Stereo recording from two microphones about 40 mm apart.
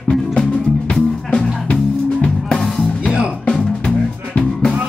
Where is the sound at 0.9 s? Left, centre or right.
Centre.